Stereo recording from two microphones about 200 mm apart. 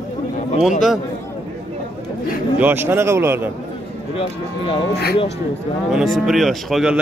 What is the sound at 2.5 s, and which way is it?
Speech, 10° right (ahead or behind).